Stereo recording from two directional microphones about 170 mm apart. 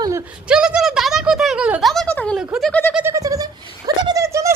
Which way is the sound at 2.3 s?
Centre (ahead or behind).